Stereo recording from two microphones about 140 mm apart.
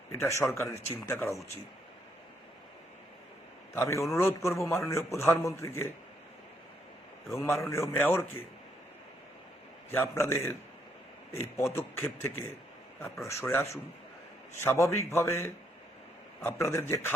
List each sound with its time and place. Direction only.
0.1 s a man's voice: 20° left (ahead or behind)
3.8 s a man's voice: 20° left (ahead or behind)
7.3 s a man's voice: 20° left (ahead or behind)
9.9 s a man's voice: 15° left (ahead or behind)